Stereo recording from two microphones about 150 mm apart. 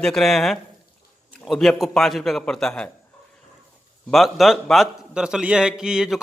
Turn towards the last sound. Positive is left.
turn(degrees=-5)  # may be behind; listen again after turning